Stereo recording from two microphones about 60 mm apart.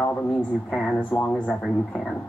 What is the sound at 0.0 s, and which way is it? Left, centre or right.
Speech, left.